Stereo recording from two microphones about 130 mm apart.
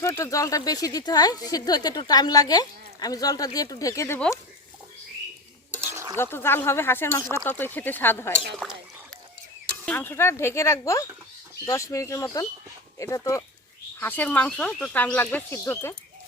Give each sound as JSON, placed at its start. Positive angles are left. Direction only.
{"t": 0.0, "sound": "speech", "side_deg": 25}
{"t": 5.8, "sound": "stir", "side_deg": -20}
{"t": 6.1, "sound": "speech", "side_deg": 20}
{"t": 9.8, "sound": "speech", "side_deg": 15}